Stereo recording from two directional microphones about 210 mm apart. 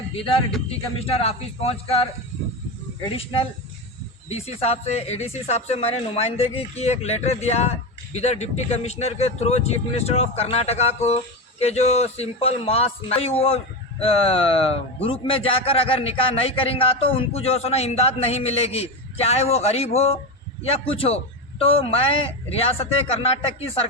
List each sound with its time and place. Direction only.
0.1 s a man's voice: 25° left (ahead or behind)
4.3 s a man's voice: 30° left (ahead or behind)